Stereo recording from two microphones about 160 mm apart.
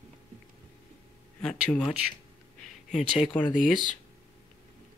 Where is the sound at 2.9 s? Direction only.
50° left (ahead or behind).